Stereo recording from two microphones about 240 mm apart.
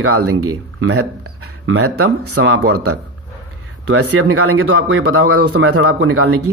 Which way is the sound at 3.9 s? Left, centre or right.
Right.